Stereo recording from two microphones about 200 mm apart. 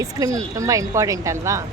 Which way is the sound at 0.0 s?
15° right (ahead or behind).